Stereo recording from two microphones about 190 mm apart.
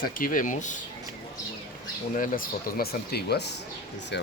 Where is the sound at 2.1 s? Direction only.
45° left (ahead or behind); by 4.3 s 65° left (ahead or behind).